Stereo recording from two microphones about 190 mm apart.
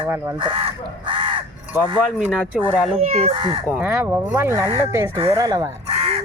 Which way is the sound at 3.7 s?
5° right (ahead or behind).